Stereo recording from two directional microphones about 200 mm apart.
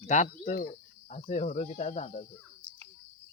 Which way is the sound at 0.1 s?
35° left (ahead or behind).